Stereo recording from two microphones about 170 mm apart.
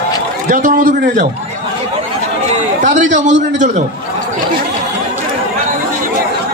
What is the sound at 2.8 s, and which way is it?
Speech, 45° right (ahead or behind).